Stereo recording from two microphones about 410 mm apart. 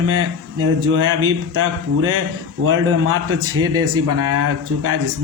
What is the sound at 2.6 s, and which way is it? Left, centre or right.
Speech, right.